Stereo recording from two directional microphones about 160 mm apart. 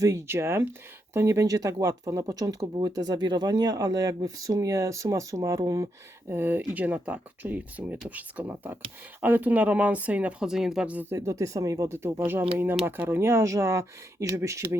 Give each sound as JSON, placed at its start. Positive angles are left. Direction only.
{"t": 0.0, "sound": "speech", "side_deg": -20}